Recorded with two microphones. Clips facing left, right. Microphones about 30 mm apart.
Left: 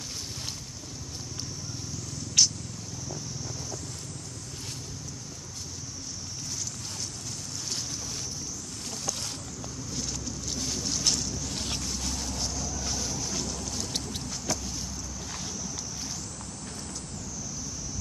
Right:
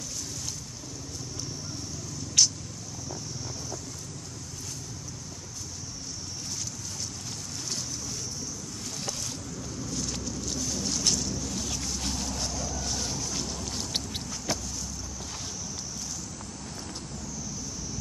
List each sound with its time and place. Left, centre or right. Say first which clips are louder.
2.4 s vehicle: even; centre
10.9 s vehicle: even; centre
11.5 s vehicle: even; left
12.4 s vehicle: right 1 dB; centre
13.7 s a sound: right 1 dB; right
14.5 s vehicle: right 1 dB; right